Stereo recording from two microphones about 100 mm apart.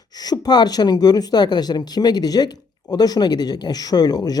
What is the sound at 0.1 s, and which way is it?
Speech, 40° left (ahead or behind).